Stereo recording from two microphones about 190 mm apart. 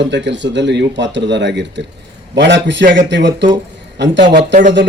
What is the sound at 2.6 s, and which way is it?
A man's voice, 70° right (ahead or behind).